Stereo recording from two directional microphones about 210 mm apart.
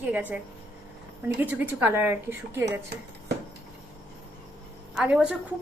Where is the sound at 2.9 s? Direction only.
50° right (ahead or behind).